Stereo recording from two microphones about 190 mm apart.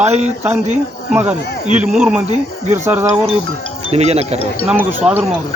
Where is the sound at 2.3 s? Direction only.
40° right (ahead or behind).